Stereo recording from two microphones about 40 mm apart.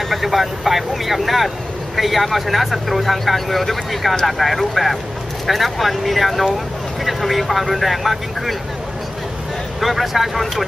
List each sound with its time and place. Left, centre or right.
0.1 s speech: centre
9.8 s speech: centre